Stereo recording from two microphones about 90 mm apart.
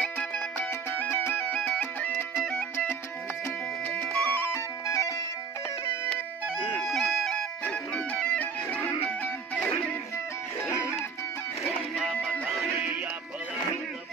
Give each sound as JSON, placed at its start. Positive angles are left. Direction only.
{"t": 0.0, "sound": "music", "side_deg": 10}
{"t": 0.7, "sound": "music", "side_deg": 20}
{"t": 4.1, "sound": "music", "side_deg": 10}
{"t": 4.5, "sound": "music", "side_deg": 35}
{"t": 6.8, "sound": "a sound", "side_deg": 0}
{"t": 7.6, "sound": "music", "side_deg": 15}
{"t": 11.9, "sound": "music", "side_deg": 5}